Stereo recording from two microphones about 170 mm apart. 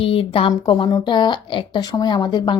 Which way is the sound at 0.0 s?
30° left (ahead or behind).